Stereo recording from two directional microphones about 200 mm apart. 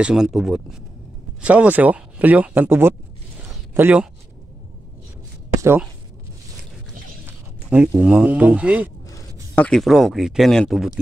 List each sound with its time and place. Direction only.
0.0 s speech: 5° right (ahead or behind)
3.3 s a sound: 10° right (ahead or behind)
5.6 s speech: 10° right (ahead or behind)
7.2 s speech: 10° right (ahead or behind)
9.0 s a sound: 15° left (ahead or behind)
9.7 s speech: centre (ahead or behind)